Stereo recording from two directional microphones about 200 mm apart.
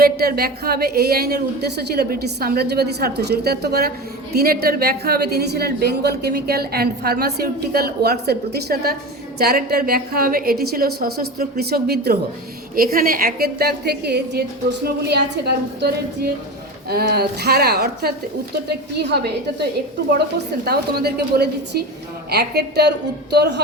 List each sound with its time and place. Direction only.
0.0 s a woman's voice: 50° right (ahead or behind)
20.7 s a woman's voice: 50° right (ahead or behind)